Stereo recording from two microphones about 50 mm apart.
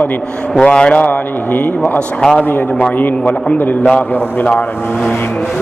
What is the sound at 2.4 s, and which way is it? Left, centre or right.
Speech, left.